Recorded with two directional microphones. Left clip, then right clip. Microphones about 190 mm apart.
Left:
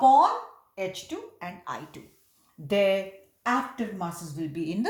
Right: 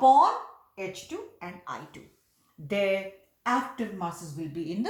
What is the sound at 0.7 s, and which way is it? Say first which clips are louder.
Speech: left 3 dB; 35° left (ahead or behind).